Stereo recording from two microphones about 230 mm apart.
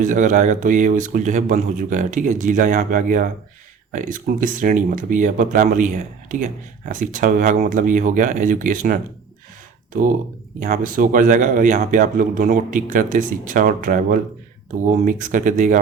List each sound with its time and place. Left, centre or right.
0.0 s speech: right
10.6 s speech: right